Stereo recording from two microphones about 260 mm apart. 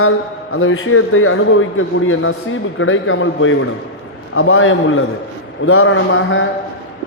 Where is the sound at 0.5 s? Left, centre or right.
Left.